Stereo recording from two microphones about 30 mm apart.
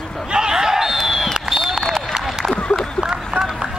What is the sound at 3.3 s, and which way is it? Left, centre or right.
Run, centre.